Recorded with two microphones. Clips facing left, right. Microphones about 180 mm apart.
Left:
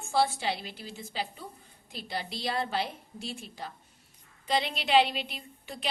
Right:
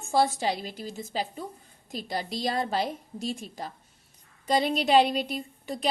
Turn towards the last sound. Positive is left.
turn(degrees=-40)  # may be behind; listen again after turning